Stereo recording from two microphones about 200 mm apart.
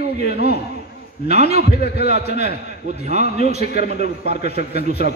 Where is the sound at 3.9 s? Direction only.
55° left (ahead or behind).